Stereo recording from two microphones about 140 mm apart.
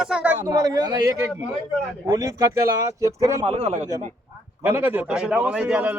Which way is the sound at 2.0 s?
25° right (ahead or behind).